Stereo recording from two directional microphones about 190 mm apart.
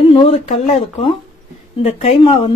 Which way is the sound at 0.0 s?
30° left (ahead or behind).